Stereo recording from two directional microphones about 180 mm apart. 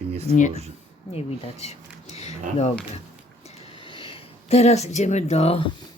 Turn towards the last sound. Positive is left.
turn(degrees=35)  # may be behind; listen again after turning